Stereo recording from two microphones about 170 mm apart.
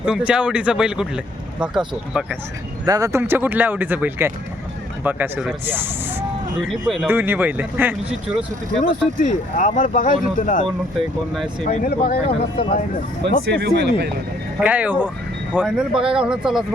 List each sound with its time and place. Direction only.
0.0 s speech: 5° right (ahead or behind)
2.8 s speech: 20° right (ahead or behind)
5.6 s vehicle: 10° right (ahead or behind)
6.8 s speech: centre (ahead or behind)
7.1 s speech: 10° right (ahead or behind)
8.8 s speech: 50° left (ahead or behind)
11.8 s speech: 60° left (ahead or behind)
13.4 s speech: 75° right (ahead or behind)
14.6 s speech: 10° right (ahead or behind)